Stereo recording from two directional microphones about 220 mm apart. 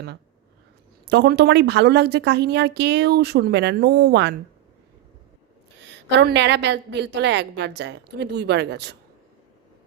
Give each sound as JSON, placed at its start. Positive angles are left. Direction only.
{"t": 1.0, "sound": "a woman's voice", "side_deg": -50}
{"t": 6.1, "sound": "a woman's voice", "side_deg": -50}